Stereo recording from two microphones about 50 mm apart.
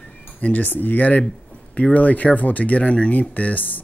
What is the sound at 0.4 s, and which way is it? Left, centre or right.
Speech, left.